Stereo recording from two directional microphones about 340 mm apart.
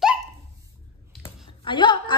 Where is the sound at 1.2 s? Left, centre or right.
Centre.